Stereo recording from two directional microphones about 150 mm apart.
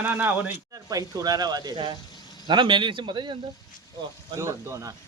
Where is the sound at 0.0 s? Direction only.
10° right (ahead or behind).